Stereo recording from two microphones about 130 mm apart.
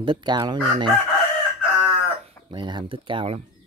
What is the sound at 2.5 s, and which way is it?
Speech, 35° right (ahead or behind).